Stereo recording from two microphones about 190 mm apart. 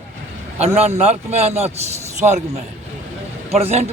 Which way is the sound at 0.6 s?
30° right (ahead or behind).